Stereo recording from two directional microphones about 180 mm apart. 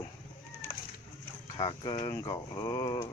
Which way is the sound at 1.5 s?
25° left (ahead or behind).